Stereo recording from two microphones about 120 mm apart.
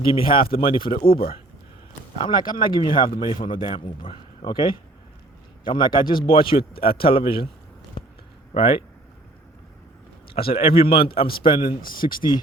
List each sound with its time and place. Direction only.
0.0 s a man's voice: 45° left (ahead or behind)
2.1 s a man's voice: 40° left (ahead or behind)
8.5 s a man's voice: 50° left (ahead or behind)
10.2 s a man's voice: 50° left (ahead or behind)
12.0 s speech: 65° left (ahead or behind)